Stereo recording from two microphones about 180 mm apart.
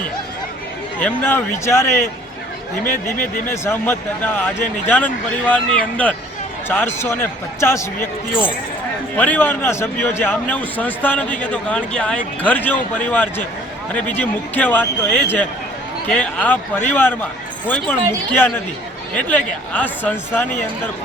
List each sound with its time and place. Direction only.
0.9 s a man's voice: 10° left (ahead or behind)
2.8 s speech: 45° left (ahead or behind)
3.5 s a man's voice: 15° left (ahead or behind)
9.1 s a man's voice: 10° left (ahead or behind)
18.3 s a man's voice: 10° left (ahead or behind)